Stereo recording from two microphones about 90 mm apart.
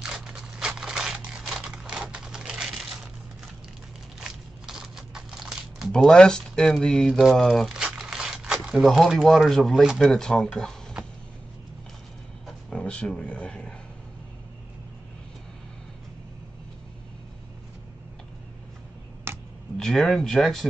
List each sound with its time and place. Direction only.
0.0 s crumpling: 5° right (ahead or behind)
4.2 s crumpling: 5° right (ahead or behind)
8.6 s speech: 5° right (ahead or behind)
12.4 s a sound: 10° left (ahead or behind)
19.3 s a sound: 25° right (ahead or behind)
19.8 s speech: 5° left (ahead or behind)